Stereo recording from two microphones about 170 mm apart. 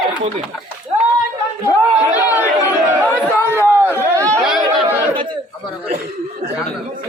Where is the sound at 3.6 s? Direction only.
15° right (ahead or behind).